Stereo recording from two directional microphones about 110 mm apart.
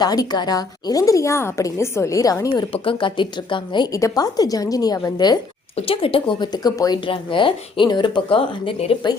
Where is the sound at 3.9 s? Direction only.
30° left (ahead or behind).